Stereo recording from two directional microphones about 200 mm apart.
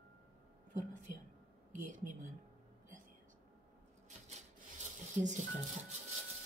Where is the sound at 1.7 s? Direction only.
40° right (ahead or behind).